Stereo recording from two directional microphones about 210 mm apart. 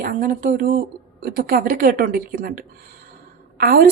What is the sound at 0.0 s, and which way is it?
Speech, 40° right (ahead or behind).